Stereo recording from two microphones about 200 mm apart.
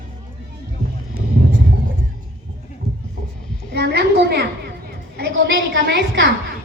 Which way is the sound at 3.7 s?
60° right (ahead or behind).